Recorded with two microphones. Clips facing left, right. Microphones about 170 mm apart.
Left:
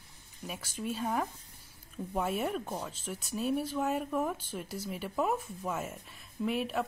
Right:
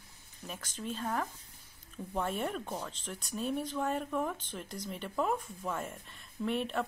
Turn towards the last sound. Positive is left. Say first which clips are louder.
# left 1 dB
turn(degrees=5)  # may be behind; listen again after turning